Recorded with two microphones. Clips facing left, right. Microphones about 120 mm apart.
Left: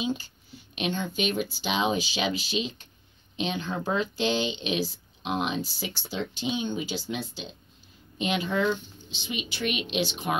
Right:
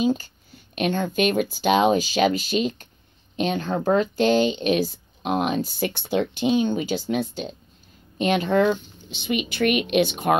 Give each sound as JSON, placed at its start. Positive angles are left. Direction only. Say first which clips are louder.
{"t": 0.0, "sound": "speech", "louder": "right 8 dB", "side_deg": -45}